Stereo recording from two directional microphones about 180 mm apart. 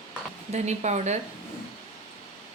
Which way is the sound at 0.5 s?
40° right (ahead or behind).